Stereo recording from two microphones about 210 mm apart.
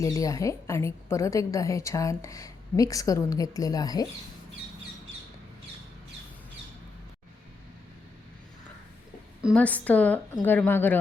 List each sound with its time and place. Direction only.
0.0 s a woman's voice: 15° left (ahead or behind)
9.6 s a woman's voice: 5° left (ahead or behind)